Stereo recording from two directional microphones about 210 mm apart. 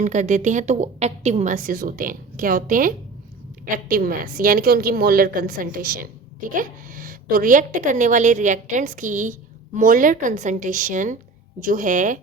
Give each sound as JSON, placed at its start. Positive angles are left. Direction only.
{"t": 0.0, "sound": "a woman's voice", "side_deg": -35}